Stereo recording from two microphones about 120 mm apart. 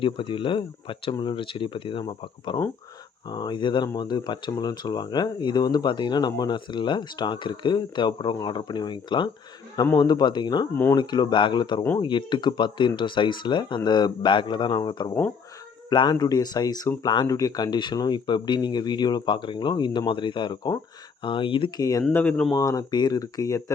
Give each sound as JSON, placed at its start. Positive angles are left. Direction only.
{"t": 0.0, "sound": "speech", "side_deg": 45}
{"t": 21.8, "sound": "speech", "side_deg": 30}
{"t": 22.1, "sound": "speech", "side_deg": 10}
{"t": 22.5, "sound": "speech", "side_deg": 30}